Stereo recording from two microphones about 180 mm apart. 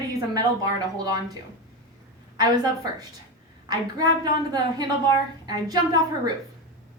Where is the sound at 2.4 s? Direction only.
20° right (ahead or behind).